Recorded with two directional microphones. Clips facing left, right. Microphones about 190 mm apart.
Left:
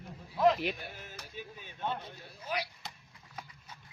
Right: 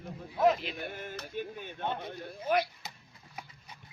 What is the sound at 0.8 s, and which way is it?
Speech, 55° right (ahead or behind).